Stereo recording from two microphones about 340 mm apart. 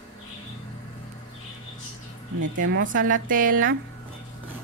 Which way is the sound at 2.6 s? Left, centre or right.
Right.